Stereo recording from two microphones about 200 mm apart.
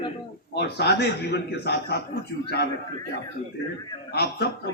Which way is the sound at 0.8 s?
55° left (ahead or behind).